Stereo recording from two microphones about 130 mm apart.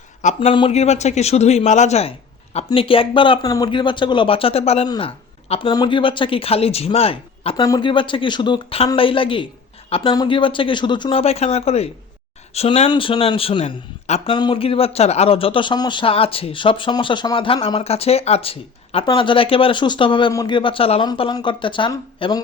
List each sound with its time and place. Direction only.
0.3 s speech: 40° left (ahead or behind)
0.8 s speech: 60° left (ahead or behind)
2.7 s a man's voice: 45° left (ahead or behind)
7.5 s a man's voice: 30° left (ahead or behind); by 12.9 s 55° left (ahead or behind)
12.9 s a man's voice: 40° left (ahead or behind)
21.2 s speech: 35° left (ahead or behind)